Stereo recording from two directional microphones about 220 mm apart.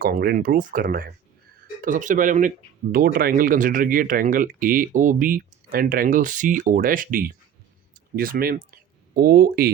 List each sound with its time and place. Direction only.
0.0 s speech: 45° right (ahead or behind)